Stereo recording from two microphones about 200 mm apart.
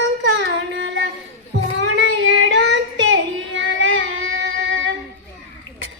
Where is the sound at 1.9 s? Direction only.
70° right (ahead or behind).